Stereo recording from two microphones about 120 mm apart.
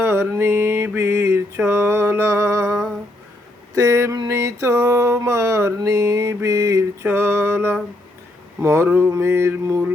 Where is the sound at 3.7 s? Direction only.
20° right (ahead or behind).